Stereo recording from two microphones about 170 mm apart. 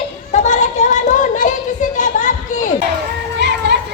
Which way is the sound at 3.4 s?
85° right.